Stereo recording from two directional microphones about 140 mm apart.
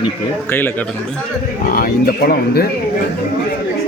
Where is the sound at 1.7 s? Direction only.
90° left.